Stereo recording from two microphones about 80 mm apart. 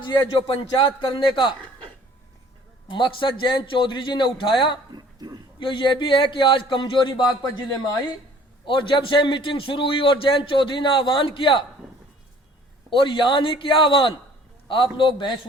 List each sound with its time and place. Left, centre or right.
0.0 s a man's voice: left
2.8 s a man's voice: left
4.9 s speech: right
5.5 s a man's voice: left
8.6 s a man's voice: left
13.0 s a man's voice: left